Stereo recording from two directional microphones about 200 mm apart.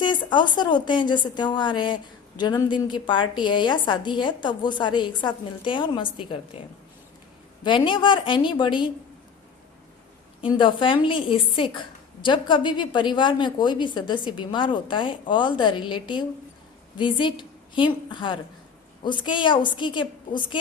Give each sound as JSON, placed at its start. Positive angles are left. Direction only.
{"t": 0.0, "sound": "a woman's voice", "side_deg": 20}
{"t": 7.6, "sound": "a woman's voice", "side_deg": 25}
{"t": 10.4, "sound": "a woman's voice", "side_deg": 25}